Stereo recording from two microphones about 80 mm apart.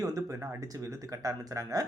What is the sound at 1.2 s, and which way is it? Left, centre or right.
Speech, right.